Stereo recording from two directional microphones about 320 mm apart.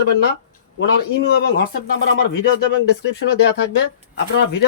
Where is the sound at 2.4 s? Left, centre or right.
Left.